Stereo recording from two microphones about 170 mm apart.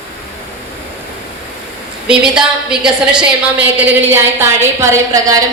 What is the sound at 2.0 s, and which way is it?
A woman's voice, 5° right (ahead or behind).